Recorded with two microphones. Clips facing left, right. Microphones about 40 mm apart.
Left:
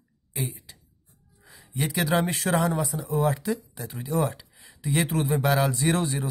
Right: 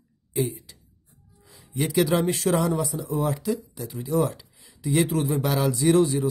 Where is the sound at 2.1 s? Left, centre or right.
Left.